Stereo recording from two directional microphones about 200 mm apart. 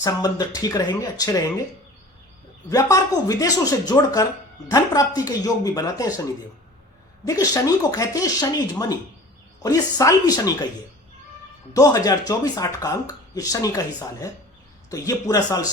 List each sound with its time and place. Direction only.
0.0 s speech: 20° left (ahead or behind)
2.6 s speech: 15° left (ahead or behind)
7.3 s speech: 15° left (ahead or behind)
11.7 s speech: 20° left (ahead or behind)